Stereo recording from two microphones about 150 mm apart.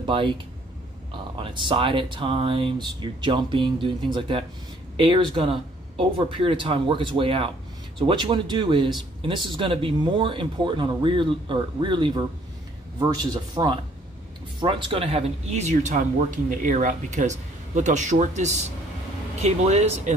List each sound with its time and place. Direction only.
0.0 s speech: 35° right (ahead or behind)
1.4 s a man's voice: 35° right (ahead or behind)